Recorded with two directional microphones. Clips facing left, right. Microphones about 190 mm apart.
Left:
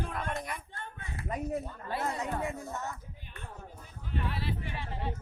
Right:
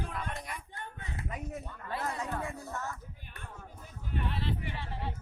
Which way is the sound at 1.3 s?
35° left (ahead or behind).